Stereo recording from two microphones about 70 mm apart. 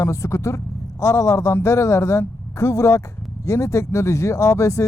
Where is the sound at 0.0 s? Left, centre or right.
Left.